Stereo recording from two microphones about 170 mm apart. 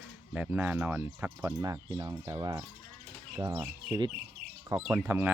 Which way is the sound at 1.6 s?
25° right (ahead or behind).